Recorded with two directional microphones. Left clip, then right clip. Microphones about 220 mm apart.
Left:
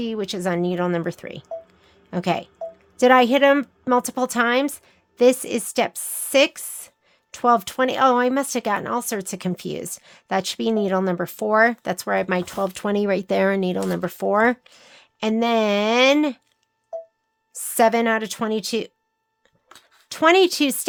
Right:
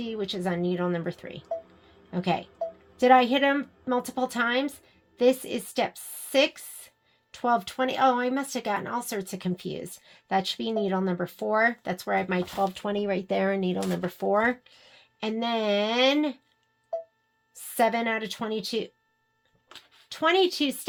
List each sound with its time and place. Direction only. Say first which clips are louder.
0.0 s a woman's voice: left 5 dB; 45° left (ahead or behind)
17.5 s a woman's voice: left 7 dB; 40° left (ahead or behind)
20.1 s a woman's voice: left 7 dB; 45° left (ahead or behind)